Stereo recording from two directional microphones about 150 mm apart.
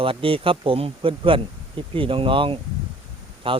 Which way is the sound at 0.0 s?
35° right (ahead or behind).